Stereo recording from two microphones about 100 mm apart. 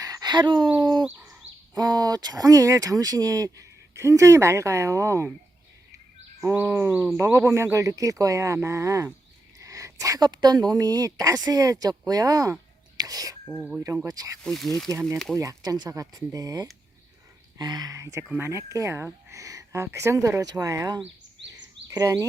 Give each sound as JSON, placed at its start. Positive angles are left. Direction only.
{"t": 0.0, "sound": "a sound", "side_deg": -40}
{"t": 0.8, "sound": "speech", "side_deg": -40}
{"t": 6.4, "sound": "speech", "side_deg": -25}
{"t": 13.6, "sound": "speech", "side_deg": -10}
{"t": 13.8, "sound": "speech", "side_deg": -30}
{"t": 14.4, "sound": "speech", "side_deg": 5}
{"t": 15.4, "sound": "speech", "side_deg": -35}